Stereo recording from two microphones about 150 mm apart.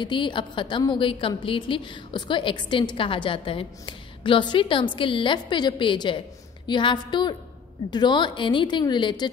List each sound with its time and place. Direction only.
0.0 s a woman's voice: 30° left (ahead or behind)